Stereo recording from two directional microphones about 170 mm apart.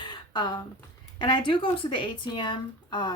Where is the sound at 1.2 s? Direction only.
25° left (ahead or behind).